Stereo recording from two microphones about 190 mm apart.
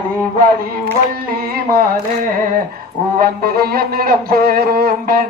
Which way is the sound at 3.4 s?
50° right (ahead or behind).